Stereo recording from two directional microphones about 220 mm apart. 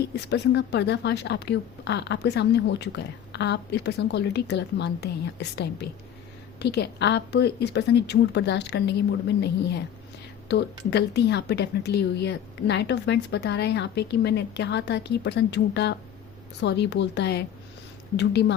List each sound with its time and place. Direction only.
0.3 s speech: 50° left (ahead or behind)